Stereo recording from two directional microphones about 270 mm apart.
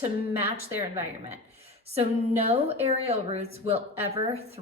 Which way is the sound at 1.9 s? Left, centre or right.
Right.